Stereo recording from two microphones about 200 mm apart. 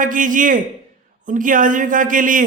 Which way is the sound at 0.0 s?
40° right (ahead or behind).